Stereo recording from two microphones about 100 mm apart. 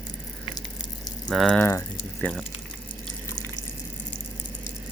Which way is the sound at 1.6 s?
25° left (ahead or behind).